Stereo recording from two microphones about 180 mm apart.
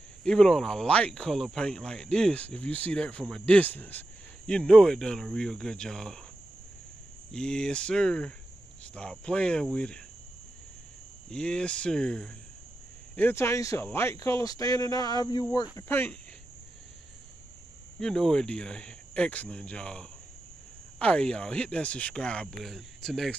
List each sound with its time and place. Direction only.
0.2 s speech: 5° left (ahead or behind)
7.2 s speech: 5° left (ahead or behind)
11.2 s speech: 5° left (ahead or behind)
17.9 s speech: centre (ahead or behind)